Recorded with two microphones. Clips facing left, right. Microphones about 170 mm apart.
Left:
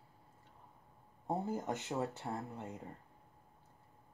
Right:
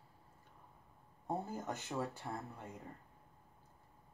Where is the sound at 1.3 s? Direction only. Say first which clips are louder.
Left 3 dB; 25° left (ahead or behind).